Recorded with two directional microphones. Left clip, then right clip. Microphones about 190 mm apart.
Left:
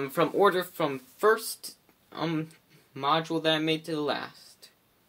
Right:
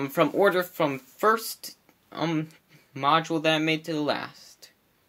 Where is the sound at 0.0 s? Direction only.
25° right (ahead or behind).